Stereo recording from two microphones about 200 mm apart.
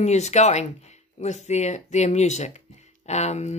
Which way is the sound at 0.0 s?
35° left (ahead or behind).